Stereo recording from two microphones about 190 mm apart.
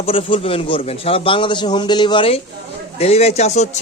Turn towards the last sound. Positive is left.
turn(degrees=35)  # may be behind; listen again after turning